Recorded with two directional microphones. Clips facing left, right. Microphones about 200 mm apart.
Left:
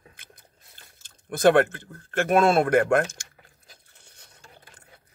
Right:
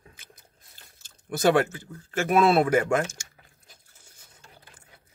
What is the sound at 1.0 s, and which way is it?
Speech, 55° left (ahead or behind).